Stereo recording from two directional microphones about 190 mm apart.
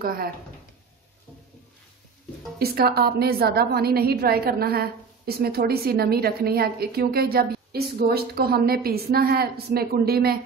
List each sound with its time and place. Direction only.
0.0 s speech: 50° right (ahead or behind)
2.6 s a woman's voice: 55° right (ahead or behind)